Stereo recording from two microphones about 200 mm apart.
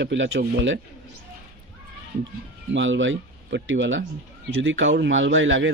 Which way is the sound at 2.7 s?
70° right (ahead or behind).